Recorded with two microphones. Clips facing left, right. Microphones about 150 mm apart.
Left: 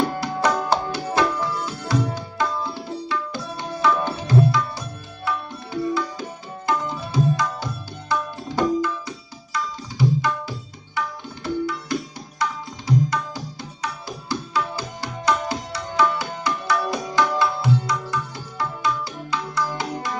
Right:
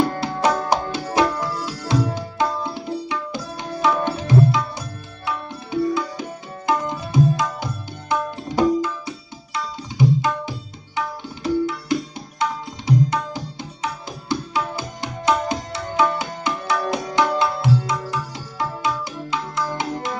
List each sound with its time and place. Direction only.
1.1 s tabla: 20° right (ahead or behind)
19.3 s music: 20° right (ahead or behind)